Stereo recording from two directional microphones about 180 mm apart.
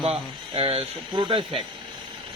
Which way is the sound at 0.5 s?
30° right (ahead or behind).